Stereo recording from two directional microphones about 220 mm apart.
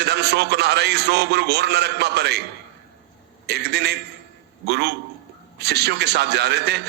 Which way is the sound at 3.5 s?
50° right (ahead or behind).